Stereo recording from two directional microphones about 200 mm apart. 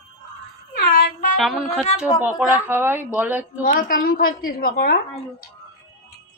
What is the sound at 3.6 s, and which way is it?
A woman's voice, 45° left (ahead or behind).